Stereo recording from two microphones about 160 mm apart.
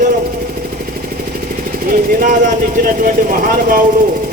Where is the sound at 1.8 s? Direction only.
55° right (ahead or behind).